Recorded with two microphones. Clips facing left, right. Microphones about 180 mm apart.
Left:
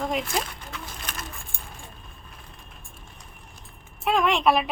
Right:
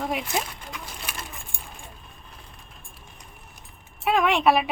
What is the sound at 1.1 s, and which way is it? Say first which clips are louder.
Keys jangling: even; 10° right (ahead or behind).